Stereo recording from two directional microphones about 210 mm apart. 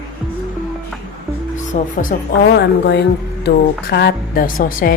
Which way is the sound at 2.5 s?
50° left (ahead or behind).